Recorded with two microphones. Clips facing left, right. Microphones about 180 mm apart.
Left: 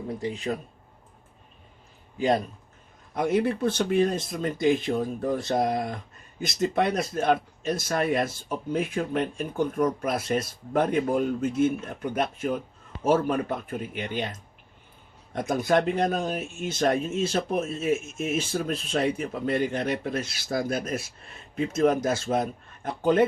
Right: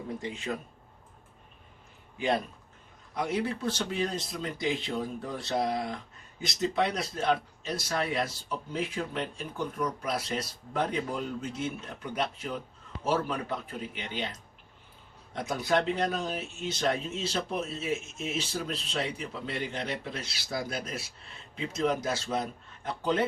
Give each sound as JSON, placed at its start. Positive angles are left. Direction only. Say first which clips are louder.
{"t": 0.2, "sound": "speech", "louder": "left 5 dB", "side_deg": 35}
{"t": 2.1, "sound": "speech", "louder": "left 5 dB", "side_deg": 40}
{"t": 3.2, "sound": "speech", "louder": "left 7 dB", "side_deg": 50}
{"t": 15.3, "sound": "speech", "louder": "left 5 dB", "side_deg": 50}